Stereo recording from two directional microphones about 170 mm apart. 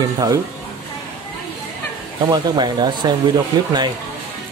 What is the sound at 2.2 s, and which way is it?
Speech, 25° right (ahead or behind).